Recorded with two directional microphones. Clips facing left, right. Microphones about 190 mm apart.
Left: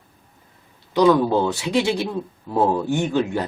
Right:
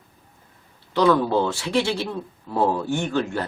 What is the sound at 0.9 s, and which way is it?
Speech, 15° left (ahead or behind).